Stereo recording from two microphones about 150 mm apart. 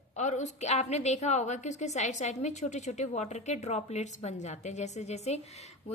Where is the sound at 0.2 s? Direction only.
50° left (ahead or behind).